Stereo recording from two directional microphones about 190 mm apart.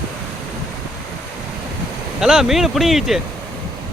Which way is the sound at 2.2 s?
5° right (ahead or behind).